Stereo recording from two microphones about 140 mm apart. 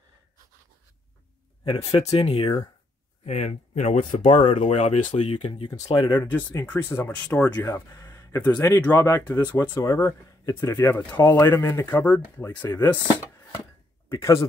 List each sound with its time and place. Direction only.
1.6 s speech: 40° left (ahead or behind)
3.3 s speech: 55° left (ahead or behind)
5.9 s speech: 15° left (ahead or behind)
7.5 s speech: 25° left (ahead or behind)
14.0 s speech: 25° left (ahead or behind)